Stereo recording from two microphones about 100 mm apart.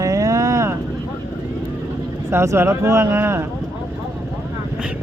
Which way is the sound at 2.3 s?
25° right (ahead or behind).